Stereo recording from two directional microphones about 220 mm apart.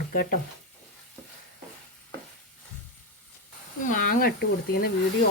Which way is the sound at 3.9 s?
40° left (ahead or behind).